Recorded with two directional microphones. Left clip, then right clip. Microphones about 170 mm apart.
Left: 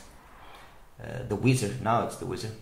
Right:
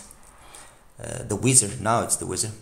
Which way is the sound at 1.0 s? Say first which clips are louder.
Right 3 dB; 55° right (ahead or behind).